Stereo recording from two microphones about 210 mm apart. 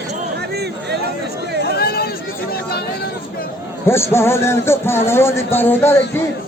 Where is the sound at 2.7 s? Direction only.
50° left (ahead or behind).